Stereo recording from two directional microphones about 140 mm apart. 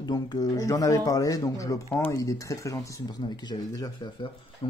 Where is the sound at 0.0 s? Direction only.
30° left (ahead or behind).